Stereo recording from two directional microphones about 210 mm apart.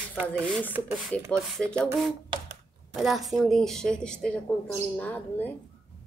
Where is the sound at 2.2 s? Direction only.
25° right (ahead or behind).